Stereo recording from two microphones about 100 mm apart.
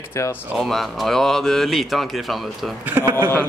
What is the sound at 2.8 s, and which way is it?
Speech, 25° right (ahead or behind).